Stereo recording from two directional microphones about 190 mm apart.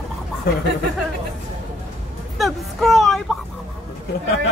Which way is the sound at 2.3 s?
Centre (ahead or behind).